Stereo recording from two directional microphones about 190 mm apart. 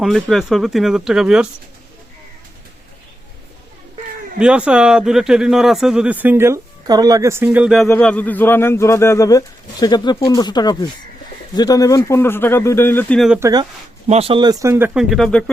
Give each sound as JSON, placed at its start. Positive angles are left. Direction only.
{"t": 0.0, "sound": "speech", "side_deg": 0}
{"t": 4.4, "sound": "speech", "side_deg": -5}
{"t": 7.9, "sound": "speech", "side_deg": 10}
{"t": 13.4, "sound": "speech", "side_deg": -20}
{"t": 14.1, "sound": "speech", "side_deg": -30}